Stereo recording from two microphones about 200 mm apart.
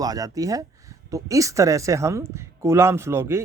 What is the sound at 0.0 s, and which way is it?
A man's voice, 20° right (ahead or behind).